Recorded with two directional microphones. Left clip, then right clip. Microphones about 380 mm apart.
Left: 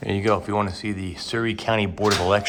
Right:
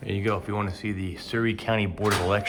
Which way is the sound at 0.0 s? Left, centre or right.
Centre.